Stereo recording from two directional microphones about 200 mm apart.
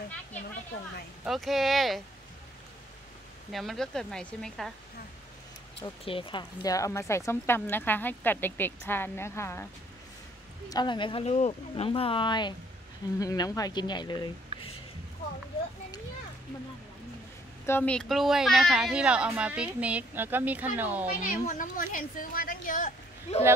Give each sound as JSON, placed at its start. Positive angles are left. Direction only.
{"t": 1.2, "sound": "speech", "side_deg": 0}
{"t": 3.5, "sound": "speech", "side_deg": 0}
{"t": 5.8, "sound": "speech", "side_deg": 25}
{"t": 10.7, "sound": "speech", "side_deg": 20}
{"t": 17.6, "sound": "speech", "side_deg": 10}
{"t": 21.5, "sound": "speech", "side_deg": 40}